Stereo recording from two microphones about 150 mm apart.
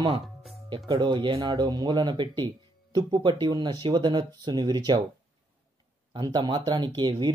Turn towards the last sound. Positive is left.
turn(degrees=-30)  # may be behind; listen again after turning